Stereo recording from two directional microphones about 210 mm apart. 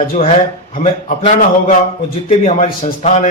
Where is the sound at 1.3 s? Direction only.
35° left (ahead or behind).